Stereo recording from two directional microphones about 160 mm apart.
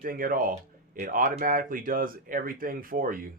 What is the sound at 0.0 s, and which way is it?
Speech, 65° right (ahead or behind).